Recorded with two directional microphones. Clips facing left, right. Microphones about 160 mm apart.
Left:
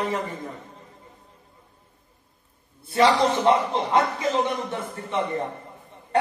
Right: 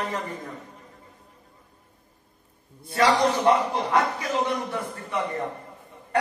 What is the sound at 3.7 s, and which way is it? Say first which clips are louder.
A man's voice: left 1 dB; 25° left (ahead or behind).